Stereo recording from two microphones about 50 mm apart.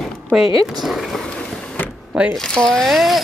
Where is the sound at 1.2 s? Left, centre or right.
Centre.